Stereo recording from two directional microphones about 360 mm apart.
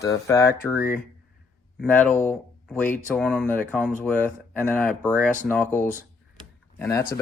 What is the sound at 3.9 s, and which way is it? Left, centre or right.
Speech, left.